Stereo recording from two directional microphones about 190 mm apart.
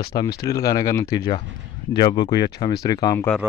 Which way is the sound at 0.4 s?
20° left (ahead or behind).